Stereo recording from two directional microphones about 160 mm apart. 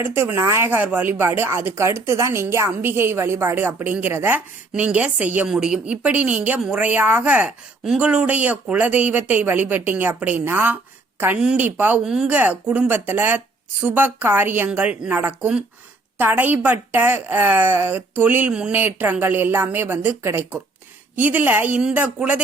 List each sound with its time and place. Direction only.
0.0 s speech: 15° right (ahead or behind)